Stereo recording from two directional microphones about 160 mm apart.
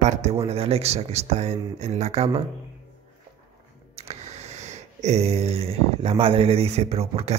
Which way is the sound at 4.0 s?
40° right (ahead or behind).